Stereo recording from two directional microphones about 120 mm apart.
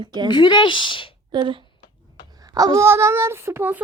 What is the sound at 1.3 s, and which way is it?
Speech, 40° right (ahead or behind).